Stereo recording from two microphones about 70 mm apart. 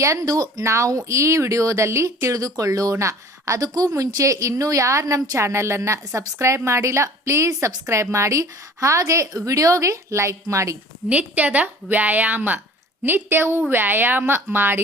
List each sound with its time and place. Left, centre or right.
0.0 s speech: right
11.1 s a woman's voice: right